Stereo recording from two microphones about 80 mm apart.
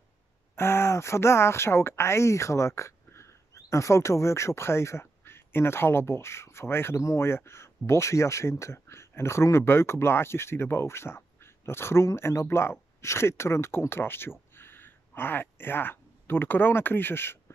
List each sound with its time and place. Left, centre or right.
0.6 s speech: left